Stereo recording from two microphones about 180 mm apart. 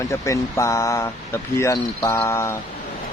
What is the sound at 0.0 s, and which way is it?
Speech, 15° left (ahead or behind).